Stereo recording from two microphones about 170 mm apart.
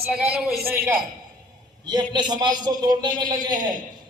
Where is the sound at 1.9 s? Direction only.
25° right (ahead or behind).